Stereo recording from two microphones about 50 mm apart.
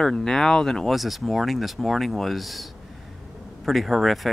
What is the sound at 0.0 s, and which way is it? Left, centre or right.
Speech, centre.